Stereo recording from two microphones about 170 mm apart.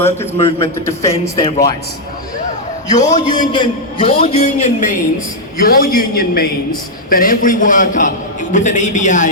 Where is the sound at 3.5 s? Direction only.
30° left (ahead or behind).